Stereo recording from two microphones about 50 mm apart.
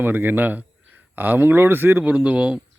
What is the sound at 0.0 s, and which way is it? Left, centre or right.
Speech, right.